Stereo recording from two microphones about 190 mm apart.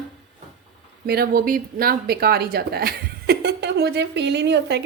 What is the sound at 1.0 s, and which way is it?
Speech, 55° right (ahead or behind).